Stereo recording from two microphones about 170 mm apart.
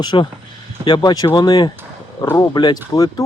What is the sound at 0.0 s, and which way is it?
Speech, 25° left (ahead or behind).